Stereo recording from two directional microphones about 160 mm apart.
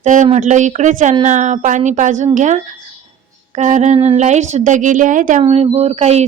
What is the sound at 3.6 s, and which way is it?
Speech, 50° right (ahead or behind).